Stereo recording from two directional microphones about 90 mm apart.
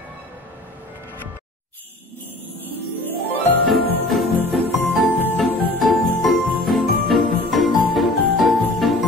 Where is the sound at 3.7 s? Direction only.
Centre (ahead or behind).